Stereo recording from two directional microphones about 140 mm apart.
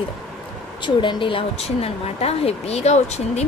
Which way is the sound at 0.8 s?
35° left (ahead or behind).